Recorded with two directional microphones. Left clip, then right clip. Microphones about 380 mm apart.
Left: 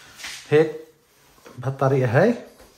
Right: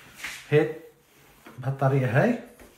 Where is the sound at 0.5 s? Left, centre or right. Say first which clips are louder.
Left 5 dB; left.